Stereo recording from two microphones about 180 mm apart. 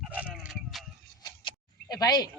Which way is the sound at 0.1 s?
5° right (ahead or behind).